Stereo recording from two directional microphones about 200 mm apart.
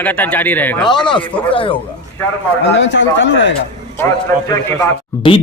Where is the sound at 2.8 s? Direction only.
65° left (ahead or behind).